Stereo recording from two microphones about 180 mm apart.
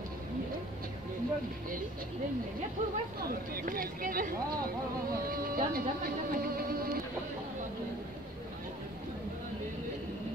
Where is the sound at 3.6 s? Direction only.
50° right (ahead or behind).